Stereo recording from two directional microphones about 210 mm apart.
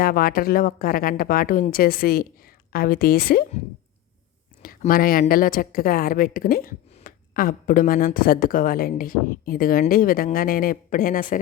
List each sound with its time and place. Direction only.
0.0 s a woman's voice: 45° left (ahead or behind)
4.6 s a woman's voice: 40° left (ahead or behind)